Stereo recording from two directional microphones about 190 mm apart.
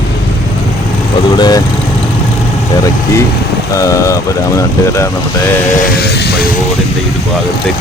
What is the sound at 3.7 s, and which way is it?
Speech, 15° left (ahead or behind).